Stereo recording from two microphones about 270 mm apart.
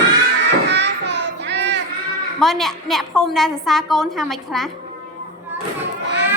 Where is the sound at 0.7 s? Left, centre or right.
Right.